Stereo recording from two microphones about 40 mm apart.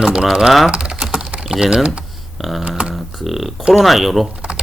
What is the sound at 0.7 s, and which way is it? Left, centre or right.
Typing, right.